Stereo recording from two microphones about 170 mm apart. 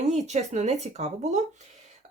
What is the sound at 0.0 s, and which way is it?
Speech, 40° right (ahead or behind).